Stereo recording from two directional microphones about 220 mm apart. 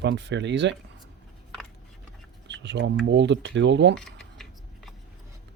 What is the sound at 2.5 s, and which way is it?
Speech, 55° right (ahead or behind).